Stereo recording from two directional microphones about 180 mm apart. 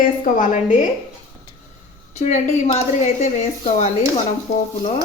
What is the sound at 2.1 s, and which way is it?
Speech, 40° left (ahead or behind).